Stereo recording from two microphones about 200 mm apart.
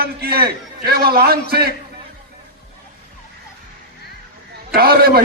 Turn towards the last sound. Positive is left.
turn(degrees=-50)  # may be behind; listen again after turning